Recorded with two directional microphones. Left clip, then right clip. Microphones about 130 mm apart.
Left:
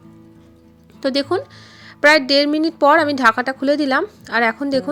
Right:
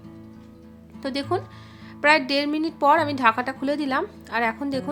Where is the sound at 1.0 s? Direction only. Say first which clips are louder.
Left 7 dB; 35° left (ahead or behind).